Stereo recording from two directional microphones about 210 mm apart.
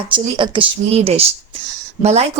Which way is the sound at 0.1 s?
25° right (ahead or behind).